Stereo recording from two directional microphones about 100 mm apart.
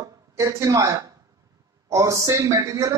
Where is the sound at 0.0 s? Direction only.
30° right (ahead or behind).